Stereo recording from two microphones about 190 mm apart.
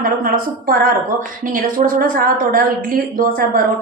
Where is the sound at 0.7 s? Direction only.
50° right (ahead or behind).